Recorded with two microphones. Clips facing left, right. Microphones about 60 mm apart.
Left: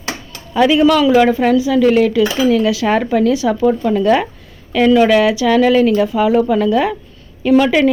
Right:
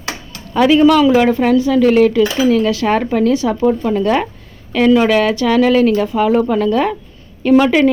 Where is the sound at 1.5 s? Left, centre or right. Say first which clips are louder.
Even; right.